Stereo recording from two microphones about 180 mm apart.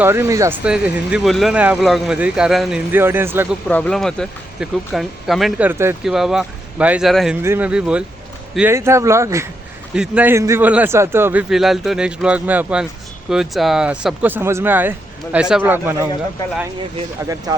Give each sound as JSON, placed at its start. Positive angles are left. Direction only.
{"t": 0.0, "sound": "speech", "side_deg": -15}
{"t": 3.7, "sound": "speech", "side_deg": 5}
{"t": 6.0, "sound": "speech", "side_deg": 0}